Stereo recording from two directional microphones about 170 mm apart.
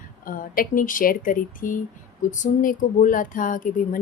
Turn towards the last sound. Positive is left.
turn(degrees=50)  # may be behind; listen again after turning